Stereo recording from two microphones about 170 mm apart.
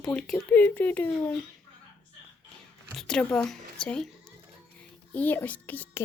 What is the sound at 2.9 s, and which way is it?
A child's voice, centre (ahead or behind).